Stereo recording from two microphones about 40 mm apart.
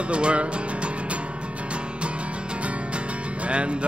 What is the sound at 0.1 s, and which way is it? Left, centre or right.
Music, right.